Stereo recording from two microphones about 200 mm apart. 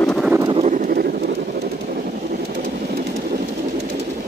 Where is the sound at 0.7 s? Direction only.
50° right (ahead or behind).